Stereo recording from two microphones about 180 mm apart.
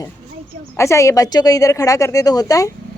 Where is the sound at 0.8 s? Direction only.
15° left (ahead or behind).